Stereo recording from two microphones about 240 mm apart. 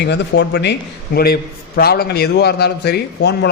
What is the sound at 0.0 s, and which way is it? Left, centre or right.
A man's voice, left.